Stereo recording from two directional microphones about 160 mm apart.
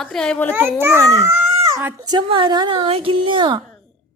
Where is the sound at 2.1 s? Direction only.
30° right (ahead or behind).